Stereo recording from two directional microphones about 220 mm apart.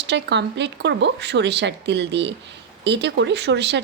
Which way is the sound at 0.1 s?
50° right (ahead or behind).